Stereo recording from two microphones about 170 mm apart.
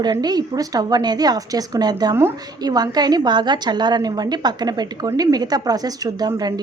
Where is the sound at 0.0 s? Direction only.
25° right (ahead or behind).